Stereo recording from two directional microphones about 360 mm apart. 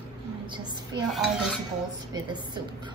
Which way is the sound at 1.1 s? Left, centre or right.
Centre.